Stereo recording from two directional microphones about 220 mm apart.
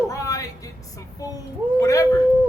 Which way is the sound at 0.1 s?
15° left (ahead or behind).